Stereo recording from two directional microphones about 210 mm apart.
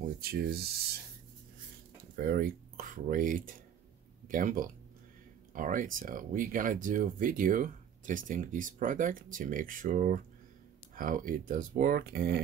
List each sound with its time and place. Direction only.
0.2 s speech: 50° right (ahead or behind)
2.1 s speech: 45° right (ahead or behind)